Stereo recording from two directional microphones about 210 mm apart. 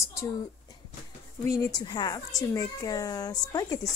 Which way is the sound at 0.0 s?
15° left (ahead or behind).